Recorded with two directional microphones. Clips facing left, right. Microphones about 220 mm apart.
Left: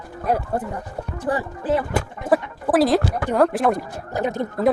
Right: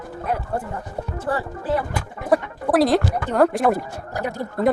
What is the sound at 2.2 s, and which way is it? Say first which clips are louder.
Speech: right 1 dB; centre (ahead or behind).